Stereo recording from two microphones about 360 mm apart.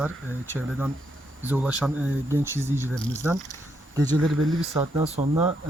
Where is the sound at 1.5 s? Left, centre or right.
Centre.